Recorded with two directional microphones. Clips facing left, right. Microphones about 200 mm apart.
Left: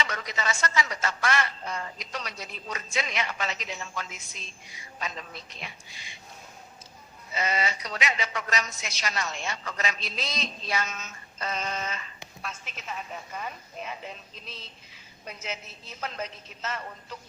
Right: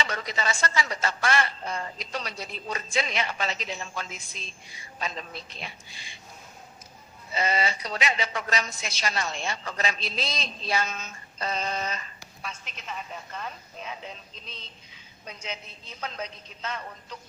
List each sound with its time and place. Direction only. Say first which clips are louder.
0.0 s a woman's voice: right 2 dB; 30° right (ahead or behind)
7.3 s a woman's voice: right 2 dB; 30° right (ahead or behind)
12.4 s a woman's voice: even; 5° left (ahead or behind)